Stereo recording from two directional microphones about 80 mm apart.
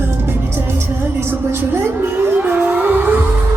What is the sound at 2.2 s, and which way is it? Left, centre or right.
Music, right.